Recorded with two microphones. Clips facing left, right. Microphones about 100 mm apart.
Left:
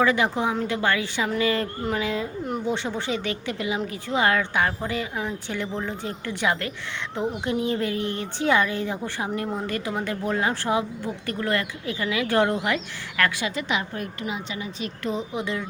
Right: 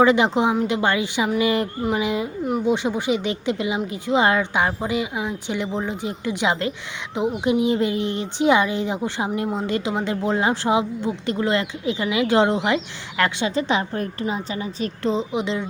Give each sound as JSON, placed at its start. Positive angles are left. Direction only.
{"t": 0.0, "sound": "a woman's voice", "side_deg": -20}